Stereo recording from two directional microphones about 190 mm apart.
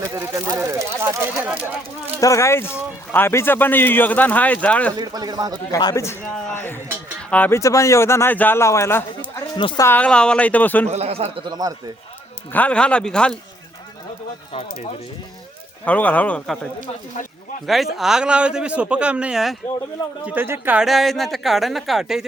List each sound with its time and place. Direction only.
0.0 s a sound: 15° right (ahead or behind)
2.2 s speech: 15° left (ahead or behind)
4.9 s speech: 20° right (ahead or behind)
5.7 s speech: 15° left (ahead or behind)
9.6 s a woman's voice: 25° left (ahead or behind)
9.8 s speech: 10° left (ahead or behind)
10.8 s speech: 35° right (ahead or behind)
12.5 s speech: 5° left (ahead or behind)
15.8 s speech: 10° left (ahead or behind)
17.7 s speech: centre (ahead or behind)